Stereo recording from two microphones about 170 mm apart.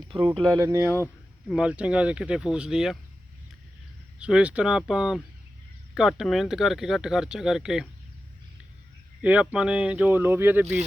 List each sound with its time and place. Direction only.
0.3 s speech: 25° right (ahead or behind)
1.0 s speech: 5° right (ahead or behind)
4.2 s speech: 5° right (ahead or behind)
9.2 s speech: 10° right (ahead or behind)